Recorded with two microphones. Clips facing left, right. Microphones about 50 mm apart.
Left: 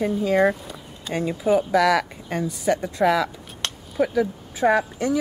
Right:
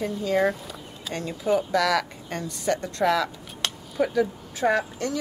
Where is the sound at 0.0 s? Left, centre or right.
Centre.